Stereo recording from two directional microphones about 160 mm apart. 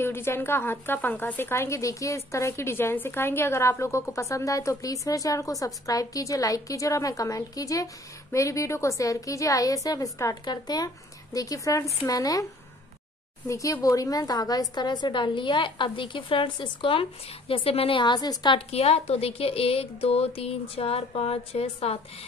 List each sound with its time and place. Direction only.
0.0 s a woman's voice: 15° left (ahead or behind)
13.5 s a woman's voice: 20° left (ahead or behind); by 22.0 s 40° left (ahead or behind)